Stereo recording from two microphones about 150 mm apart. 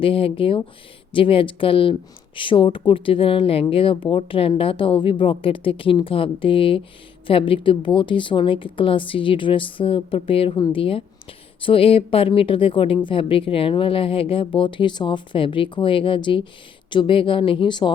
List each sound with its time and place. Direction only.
0.0 s speech: 35° left (ahead or behind)